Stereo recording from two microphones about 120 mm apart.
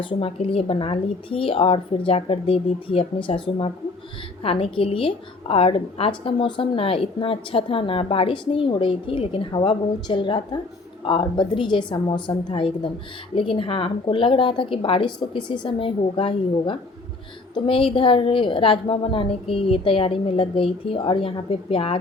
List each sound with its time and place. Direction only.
0.0 s a woman's voice: 50° left (ahead or behind)